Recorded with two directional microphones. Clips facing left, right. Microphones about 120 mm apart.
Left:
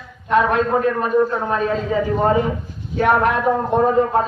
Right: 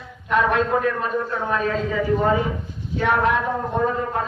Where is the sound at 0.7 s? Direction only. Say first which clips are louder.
Left 4 dB; 30° left (ahead or behind).